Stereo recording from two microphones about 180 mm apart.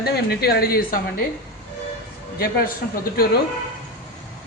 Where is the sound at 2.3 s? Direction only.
55° left (ahead or behind).